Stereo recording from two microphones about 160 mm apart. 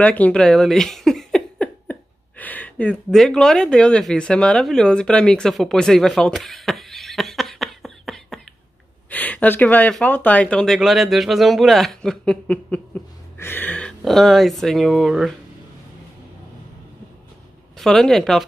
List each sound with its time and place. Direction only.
0.0 s speech: 10° left (ahead or behind)
17.7 s speech: 5° left (ahead or behind)